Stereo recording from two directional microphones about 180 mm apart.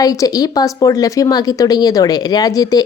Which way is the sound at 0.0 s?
20° left (ahead or behind).